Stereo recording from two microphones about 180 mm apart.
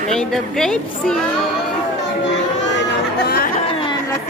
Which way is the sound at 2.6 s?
70° left (ahead or behind).